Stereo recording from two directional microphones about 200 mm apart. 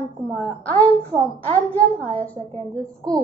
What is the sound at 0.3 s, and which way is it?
A woman's voice, 10° left (ahead or behind).